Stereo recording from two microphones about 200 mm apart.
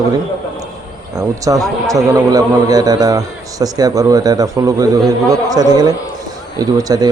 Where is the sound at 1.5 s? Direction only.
20° right (ahead or behind).